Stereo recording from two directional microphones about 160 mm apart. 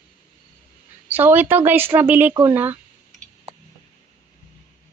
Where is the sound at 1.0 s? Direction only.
10° right (ahead or behind).